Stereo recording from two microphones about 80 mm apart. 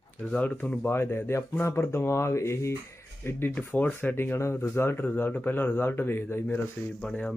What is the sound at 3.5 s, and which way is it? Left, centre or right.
Speech, left.